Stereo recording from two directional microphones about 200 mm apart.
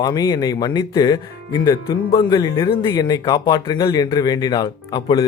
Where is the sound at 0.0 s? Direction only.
20° left (ahead or behind).